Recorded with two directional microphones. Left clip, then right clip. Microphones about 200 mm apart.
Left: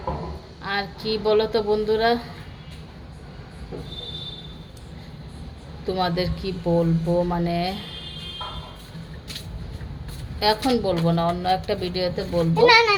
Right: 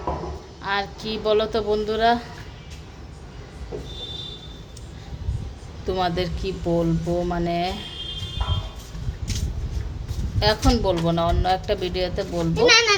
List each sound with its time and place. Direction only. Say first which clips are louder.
0.6 s speech: right 1 dB; centre (ahead or behind)
5.8 s speech: even; centre (ahead or behind)
10.4 s speech: even; centre (ahead or behind)
12.5 s a child's voice: left 1 dB; 30° left (ahead or behind)